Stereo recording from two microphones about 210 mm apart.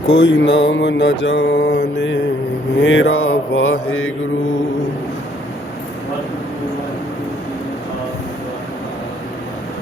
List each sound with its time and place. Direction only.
0.2 s mantra: 55° left (ahead or behind)